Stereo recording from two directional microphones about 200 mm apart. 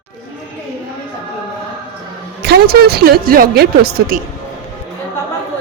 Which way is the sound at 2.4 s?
55° right (ahead or behind).